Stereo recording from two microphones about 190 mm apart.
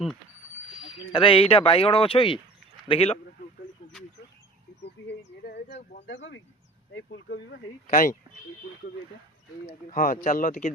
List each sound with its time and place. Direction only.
0.8 s speech: 25° left (ahead or behind)
4.8 s a sound: 60° left (ahead or behind)
6.1 s speech: 65° left (ahead or behind)
7.9 s speech: 45° left (ahead or behind)
9.9 s speech: 45° left (ahead or behind)